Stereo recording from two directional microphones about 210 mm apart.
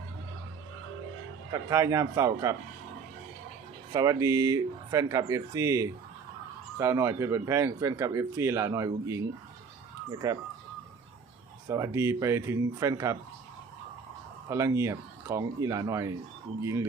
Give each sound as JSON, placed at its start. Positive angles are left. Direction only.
{"t": 1.7, "sound": "speech", "side_deg": -15}
{"t": 3.9, "sound": "speech", "side_deg": -15}
{"t": 11.7, "sound": "speech", "side_deg": -15}
{"t": 14.5, "sound": "speech", "side_deg": -15}